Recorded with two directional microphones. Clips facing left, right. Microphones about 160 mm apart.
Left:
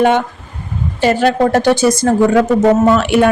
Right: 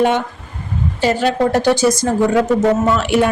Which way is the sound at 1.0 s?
55° left (ahead or behind).